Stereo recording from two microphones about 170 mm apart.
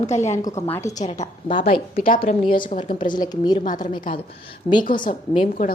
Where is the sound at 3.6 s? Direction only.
50° left (ahead or behind).